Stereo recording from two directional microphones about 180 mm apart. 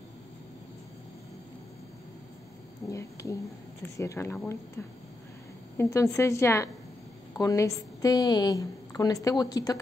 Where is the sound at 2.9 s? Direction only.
15° left (ahead or behind).